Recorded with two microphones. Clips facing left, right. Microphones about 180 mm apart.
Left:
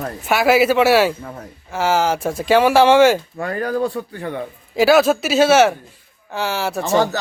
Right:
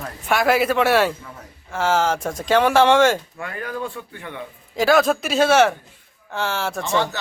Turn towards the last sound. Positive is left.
turn(degrees=40)  # may be behind; listen again after turning